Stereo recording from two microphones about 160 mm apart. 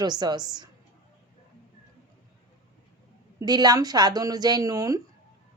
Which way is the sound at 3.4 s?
25° right (ahead or behind).